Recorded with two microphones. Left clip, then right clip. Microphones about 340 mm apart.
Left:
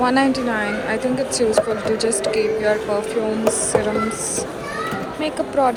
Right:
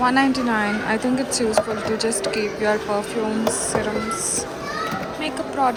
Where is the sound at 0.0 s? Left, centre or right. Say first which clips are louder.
Left 1 dB; centre.